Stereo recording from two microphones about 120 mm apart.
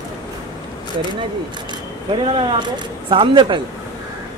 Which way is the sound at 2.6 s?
40° right (ahead or behind).